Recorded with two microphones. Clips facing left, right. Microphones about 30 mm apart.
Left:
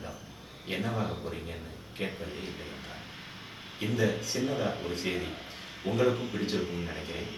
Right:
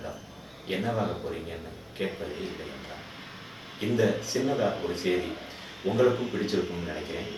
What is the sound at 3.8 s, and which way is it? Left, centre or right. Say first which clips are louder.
A man's voice: right 4 dB; centre.